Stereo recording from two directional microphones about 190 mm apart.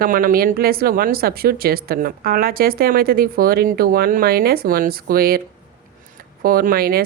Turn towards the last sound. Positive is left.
turn(degrees=-50)  # may be behind; listen again after turning